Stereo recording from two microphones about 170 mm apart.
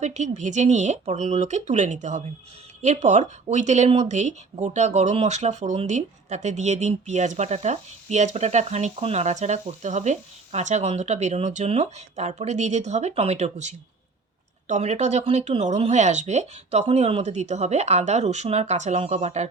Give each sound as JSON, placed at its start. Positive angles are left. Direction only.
{"t": 0.0, "sound": "speech", "side_deg": -45}